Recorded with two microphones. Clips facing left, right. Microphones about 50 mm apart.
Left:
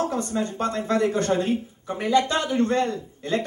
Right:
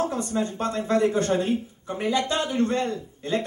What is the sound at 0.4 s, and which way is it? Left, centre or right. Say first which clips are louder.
A man's voice: right 1 dB; centre.